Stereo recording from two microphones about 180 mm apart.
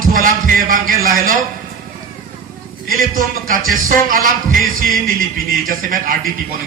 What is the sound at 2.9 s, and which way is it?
A man's voice, 50° right (ahead or behind).